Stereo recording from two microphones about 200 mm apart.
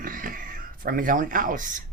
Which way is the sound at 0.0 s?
45° right (ahead or behind).